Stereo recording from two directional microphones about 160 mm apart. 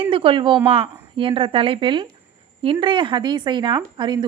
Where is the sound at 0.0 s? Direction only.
35° right (ahead or behind).